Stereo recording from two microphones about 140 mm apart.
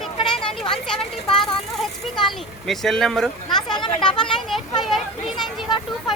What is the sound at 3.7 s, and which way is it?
Speech, 35° left (ahead or behind).